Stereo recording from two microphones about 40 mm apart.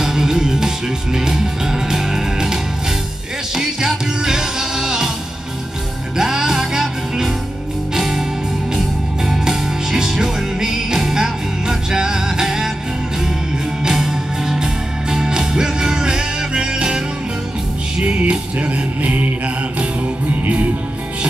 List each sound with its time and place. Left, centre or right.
0.0 s music: centre
6.1 s music: centre
13.8 s music: centre
18.0 s music: right
20.4 s music: right